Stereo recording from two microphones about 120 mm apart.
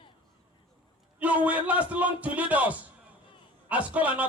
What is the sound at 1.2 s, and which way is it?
A man's voice, 10° right (ahead or behind).